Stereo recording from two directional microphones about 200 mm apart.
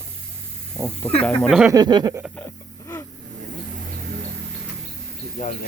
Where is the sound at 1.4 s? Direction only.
Centre (ahead or behind).